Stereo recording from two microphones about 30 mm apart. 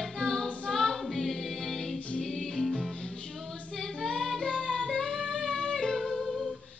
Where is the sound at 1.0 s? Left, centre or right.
Centre.